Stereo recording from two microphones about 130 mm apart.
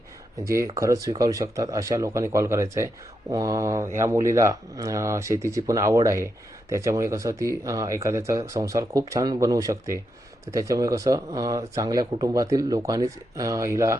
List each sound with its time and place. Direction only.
0.8 s speech: 25° right (ahead or behind)